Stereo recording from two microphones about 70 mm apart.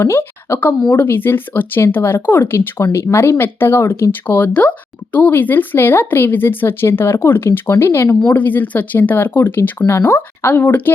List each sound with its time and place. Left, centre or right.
0.0 s speech: left
8.3 s speech: left